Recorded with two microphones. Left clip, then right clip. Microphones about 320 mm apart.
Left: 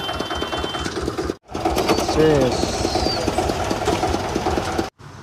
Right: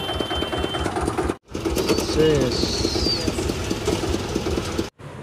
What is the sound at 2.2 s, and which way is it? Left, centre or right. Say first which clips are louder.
Speech: left 2 dB; centre.